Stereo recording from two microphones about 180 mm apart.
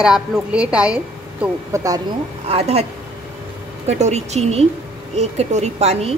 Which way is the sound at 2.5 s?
35° right (ahead or behind).